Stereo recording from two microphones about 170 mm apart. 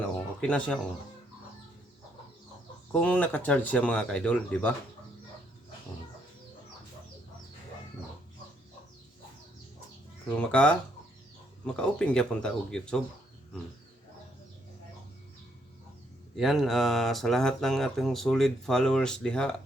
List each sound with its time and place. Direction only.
0.0 s a sound: 5° left (ahead or behind)
2.9 s speech: 5° left (ahead or behind)
10.3 s speech: 5° left (ahead or behind)
16.3 s speech: centre (ahead or behind)